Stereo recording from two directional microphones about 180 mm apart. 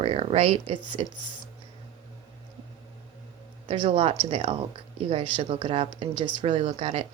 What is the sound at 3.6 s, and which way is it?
Speech, 30° right (ahead or behind).